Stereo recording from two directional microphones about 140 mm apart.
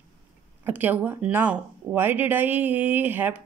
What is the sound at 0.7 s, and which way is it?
Speech, 15° right (ahead or behind).